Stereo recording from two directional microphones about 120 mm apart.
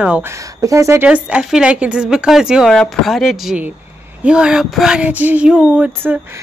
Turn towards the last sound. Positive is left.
turn(degrees=-10)  # may be behind; listen again after turning